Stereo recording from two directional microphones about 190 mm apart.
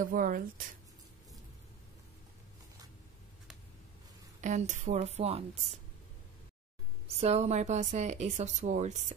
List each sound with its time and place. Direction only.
0.0 s speech: 45° right (ahead or behind)
4.4 s a woman's voice: 40° right (ahead or behind)
7.1 s a woman's voice: 35° right (ahead or behind)